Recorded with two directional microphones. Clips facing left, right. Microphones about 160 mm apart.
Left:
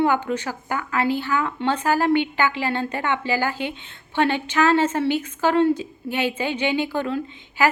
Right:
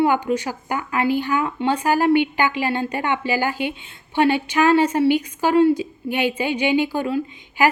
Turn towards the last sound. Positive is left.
turn(degrees=-15)  # may be behind; listen again after turning